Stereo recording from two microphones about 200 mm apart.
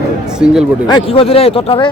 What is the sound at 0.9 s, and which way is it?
Speech, 25° left (ahead or behind).